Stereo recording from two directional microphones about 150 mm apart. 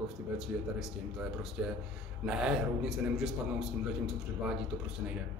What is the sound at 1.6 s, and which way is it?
A man's voice, 10° right (ahead or behind).